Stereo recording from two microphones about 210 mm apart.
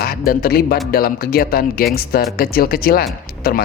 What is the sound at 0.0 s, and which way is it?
Speech, 45° left (ahead or behind).